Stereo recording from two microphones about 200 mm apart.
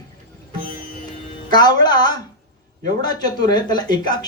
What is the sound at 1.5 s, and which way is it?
A man's voice, 20° left (ahead or behind).